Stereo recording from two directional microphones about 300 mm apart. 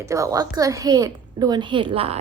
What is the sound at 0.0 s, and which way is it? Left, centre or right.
A woman's voice, centre.